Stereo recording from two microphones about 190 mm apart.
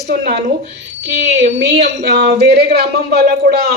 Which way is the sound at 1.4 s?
65° right (ahead or behind).